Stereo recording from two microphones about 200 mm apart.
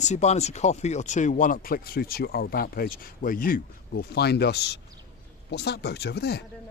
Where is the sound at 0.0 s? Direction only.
35° left (ahead or behind); by 6.4 s 55° left (ahead or behind).